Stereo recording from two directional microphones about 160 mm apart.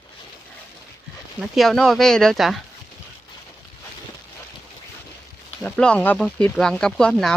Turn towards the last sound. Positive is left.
turn(degrees=5)  # may be behind; listen again after turning